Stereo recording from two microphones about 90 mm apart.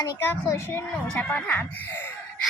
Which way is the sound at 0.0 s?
35° left (ahead or behind).